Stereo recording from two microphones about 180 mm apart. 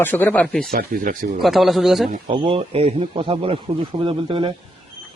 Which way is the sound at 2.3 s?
30° right (ahead or behind).